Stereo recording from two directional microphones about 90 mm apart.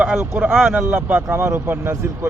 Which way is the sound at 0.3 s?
10° right (ahead or behind).